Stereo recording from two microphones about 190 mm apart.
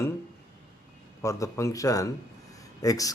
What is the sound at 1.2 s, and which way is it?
Speech, 15° left (ahead or behind).